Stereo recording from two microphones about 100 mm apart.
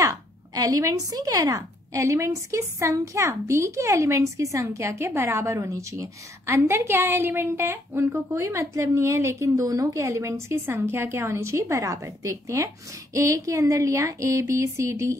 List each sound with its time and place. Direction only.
0.0 s speech: 35° right (ahead or behind)